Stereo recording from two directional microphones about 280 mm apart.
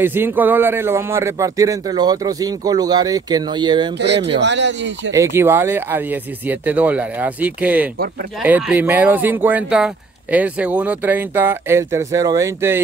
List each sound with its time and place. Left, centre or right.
0.0 s speech: centre
4.3 s speech: right
5.1 s speech: centre